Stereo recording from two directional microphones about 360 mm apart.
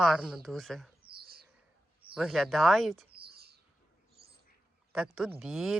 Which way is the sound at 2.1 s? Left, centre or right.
Centre.